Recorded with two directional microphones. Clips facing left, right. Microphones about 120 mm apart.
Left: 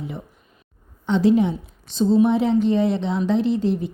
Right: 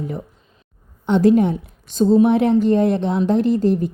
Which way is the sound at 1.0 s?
50° right (ahead or behind).